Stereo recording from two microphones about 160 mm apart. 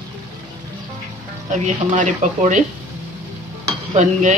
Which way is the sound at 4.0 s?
50° right (ahead or behind).